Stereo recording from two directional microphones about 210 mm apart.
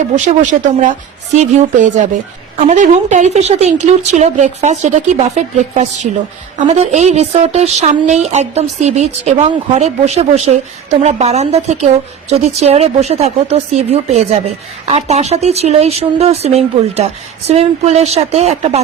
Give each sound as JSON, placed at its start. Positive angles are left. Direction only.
{"t": 0.3, "sound": "speech", "side_deg": -35}